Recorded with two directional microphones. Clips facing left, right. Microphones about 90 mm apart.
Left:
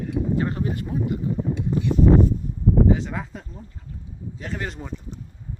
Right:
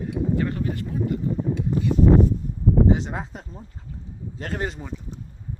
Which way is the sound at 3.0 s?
25° right (ahead or behind).